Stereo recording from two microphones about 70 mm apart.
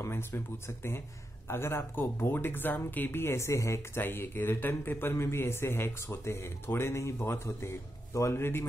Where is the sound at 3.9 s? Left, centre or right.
Left.